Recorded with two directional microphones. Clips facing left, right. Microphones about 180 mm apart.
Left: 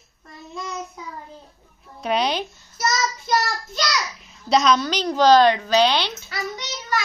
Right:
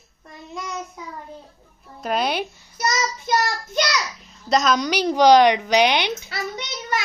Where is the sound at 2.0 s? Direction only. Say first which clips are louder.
Left 1 dB; 5° right (ahead or behind).